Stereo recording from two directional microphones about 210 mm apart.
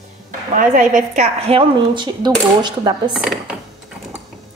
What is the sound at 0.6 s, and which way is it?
A woman's voice, 35° right (ahead or behind).